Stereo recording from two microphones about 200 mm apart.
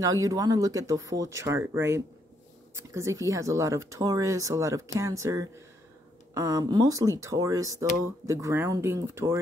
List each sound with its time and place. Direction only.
0.0 s speech: 15° right (ahead or behind)